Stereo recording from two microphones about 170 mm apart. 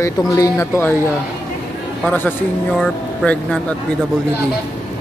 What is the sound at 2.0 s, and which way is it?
Speech, 10° left (ahead or behind).